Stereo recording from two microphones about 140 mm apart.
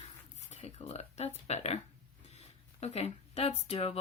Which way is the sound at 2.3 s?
50° left (ahead or behind).